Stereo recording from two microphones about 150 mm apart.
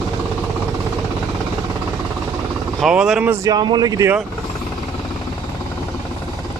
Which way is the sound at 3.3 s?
25° right (ahead or behind).